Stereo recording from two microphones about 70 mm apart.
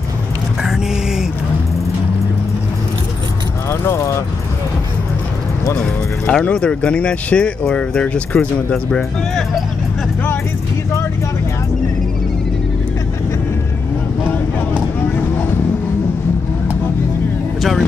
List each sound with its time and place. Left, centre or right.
3.8 s speech: left
5.8 s speech: centre
17.6 s vehicle: centre